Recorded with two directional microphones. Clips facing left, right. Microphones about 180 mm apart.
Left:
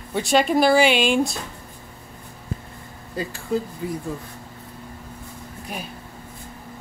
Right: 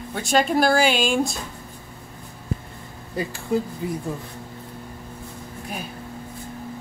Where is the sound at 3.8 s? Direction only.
25° right (ahead or behind).